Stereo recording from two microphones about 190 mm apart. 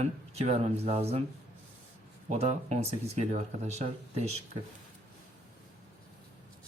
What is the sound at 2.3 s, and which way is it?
Speech, 35° right (ahead or behind).